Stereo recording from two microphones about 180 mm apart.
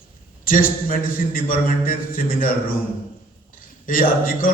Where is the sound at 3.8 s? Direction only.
50° left (ahead or behind).